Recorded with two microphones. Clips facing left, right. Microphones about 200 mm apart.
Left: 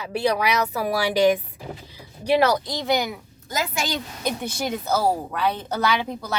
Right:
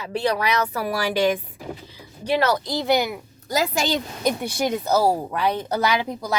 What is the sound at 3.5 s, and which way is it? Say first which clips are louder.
Speech: right 4 dB; 35° right (ahead or behind).